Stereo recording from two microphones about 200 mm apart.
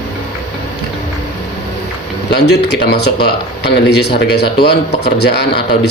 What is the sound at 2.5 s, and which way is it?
Speech, 55° left (ahead or behind).